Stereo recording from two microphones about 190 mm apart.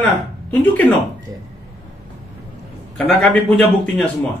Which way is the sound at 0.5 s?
10° left (ahead or behind).